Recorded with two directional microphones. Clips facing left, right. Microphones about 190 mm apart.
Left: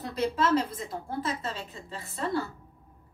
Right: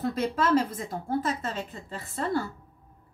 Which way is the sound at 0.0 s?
50° right (ahead or behind).